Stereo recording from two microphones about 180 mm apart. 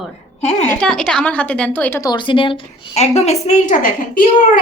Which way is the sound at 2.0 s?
25° left (ahead or behind).